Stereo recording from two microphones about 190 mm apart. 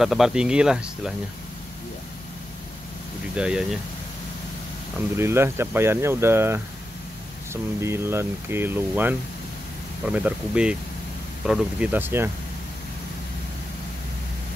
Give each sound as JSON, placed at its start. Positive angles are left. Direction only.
{"t": 0.0, "sound": "speech", "side_deg": 0}
{"t": 3.3, "sound": "speech", "side_deg": -5}
{"t": 5.1, "sound": "speech", "side_deg": -15}
{"t": 7.8, "sound": "speech", "side_deg": -15}